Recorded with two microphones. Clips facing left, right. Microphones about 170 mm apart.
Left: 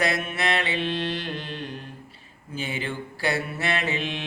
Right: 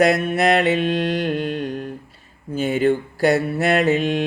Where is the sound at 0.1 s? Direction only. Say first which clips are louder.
Right 9 dB; 40° right (ahead or behind).